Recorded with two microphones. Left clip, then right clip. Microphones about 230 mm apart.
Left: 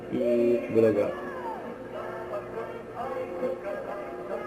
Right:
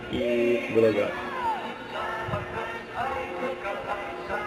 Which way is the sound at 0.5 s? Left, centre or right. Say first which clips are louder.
Right 1 dB; centre.